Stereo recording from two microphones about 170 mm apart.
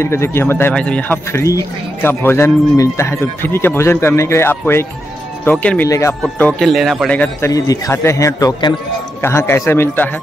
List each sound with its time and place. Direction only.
0.0 s speech: 15° left (ahead or behind)
6.2 s speech: 5° left (ahead or behind)
7.5 s a man's voice: 20° left (ahead or behind)